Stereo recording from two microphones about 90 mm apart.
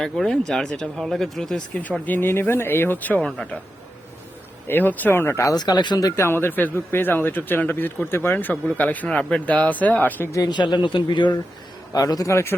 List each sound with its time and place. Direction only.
0.0 s speech: 5° left (ahead or behind)
4.7 s a man's voice: 20° left (ahead or behind)
5.5 s speech: 55° left (ahead or behind)
6.2 s a man's voice: 25° left (ahead or behind)
10.5 s a man's voice: 60° left (ahead or behind)
11.9 s a man's voice: 40° left (ahead or behind)